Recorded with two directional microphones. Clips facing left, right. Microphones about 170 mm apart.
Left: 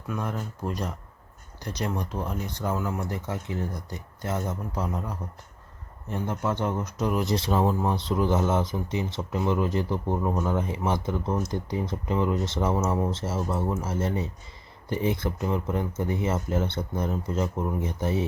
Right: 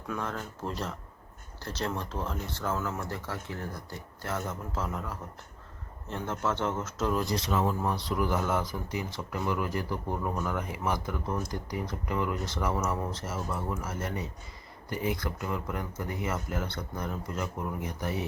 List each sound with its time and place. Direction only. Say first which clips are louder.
0.1 s speech: left 3 dB; 15° left (ahead or behind)
7.3 s speech: left 4 dB; 30° left (ahead or behind)